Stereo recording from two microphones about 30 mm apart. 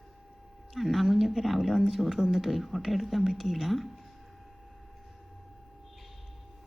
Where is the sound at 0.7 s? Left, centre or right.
Centre.